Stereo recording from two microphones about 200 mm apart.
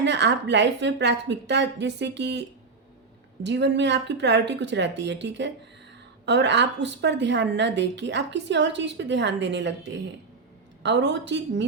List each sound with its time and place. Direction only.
0.0 s a woman's voice: 60° right (ahead or behind)
3.4 s a woman's voice: 60° right (ahead or behind)
10.8 s a woman's voice: 60° right (ahead or behind)